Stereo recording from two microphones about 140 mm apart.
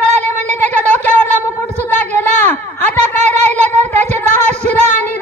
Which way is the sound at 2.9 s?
55° right (ahead or behind).